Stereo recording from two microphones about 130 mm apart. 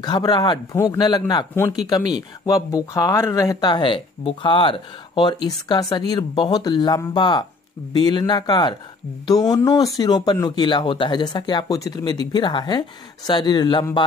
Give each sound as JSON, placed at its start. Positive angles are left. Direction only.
{"t": 0.0, "sound": "speech", "side_deg": 30}